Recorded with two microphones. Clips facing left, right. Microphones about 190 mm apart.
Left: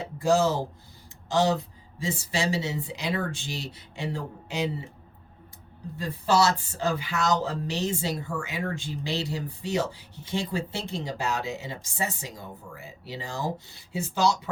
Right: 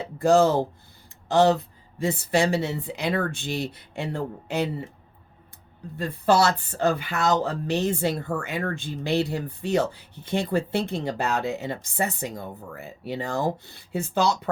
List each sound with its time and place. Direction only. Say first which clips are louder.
0.2 s speech: right 5 dB; 55° right (ahead or behind)
6.0 s speech: right 3 dB; 55° right (ahead or behind)